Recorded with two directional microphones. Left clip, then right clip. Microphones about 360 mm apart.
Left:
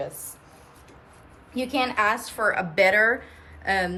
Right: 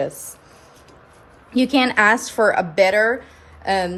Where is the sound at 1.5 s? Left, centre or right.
Right; by 3.9 s centre.